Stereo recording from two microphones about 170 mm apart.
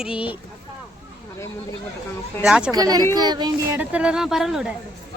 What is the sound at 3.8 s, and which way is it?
Speech, 5° right (ahead or behind).